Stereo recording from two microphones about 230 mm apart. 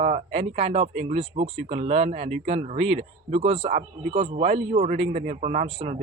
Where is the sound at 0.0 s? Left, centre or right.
Right.